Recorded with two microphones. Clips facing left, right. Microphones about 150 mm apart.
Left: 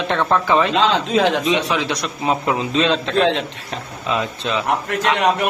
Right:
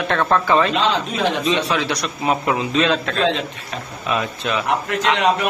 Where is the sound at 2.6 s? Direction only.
30° left (ahead or behind).